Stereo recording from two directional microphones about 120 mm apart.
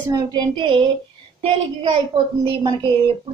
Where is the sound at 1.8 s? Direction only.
45° right (ahead or behind).